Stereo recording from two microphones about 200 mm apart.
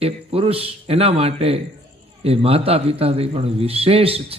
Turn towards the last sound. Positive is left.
turn(degrees=-30)  # may be behind; listen again after turning